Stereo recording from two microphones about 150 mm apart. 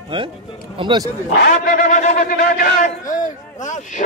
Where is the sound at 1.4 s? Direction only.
65° left (ahead or behind).